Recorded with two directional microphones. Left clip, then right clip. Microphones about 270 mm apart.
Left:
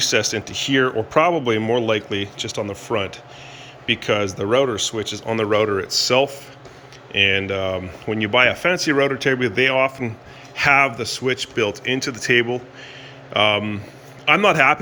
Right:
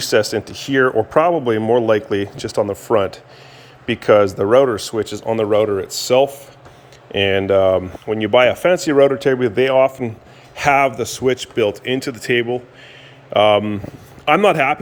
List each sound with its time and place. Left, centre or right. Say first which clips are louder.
0.0 s speech: right 3 dB; centre
2.2 s speech: right 2 dB; right
2.6 s speech: right 8 dB; centre